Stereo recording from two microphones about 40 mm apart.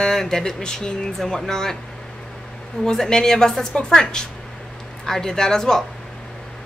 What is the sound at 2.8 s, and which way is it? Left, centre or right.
A man's voice, centre.